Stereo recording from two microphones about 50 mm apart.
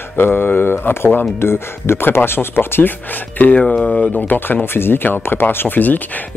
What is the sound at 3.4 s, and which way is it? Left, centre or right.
Speech, left.